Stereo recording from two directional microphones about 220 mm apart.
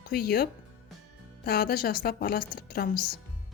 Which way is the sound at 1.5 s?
45° left (ahead or behind).